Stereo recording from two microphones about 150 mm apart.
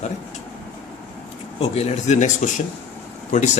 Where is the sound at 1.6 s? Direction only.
45° left (ahead or behind).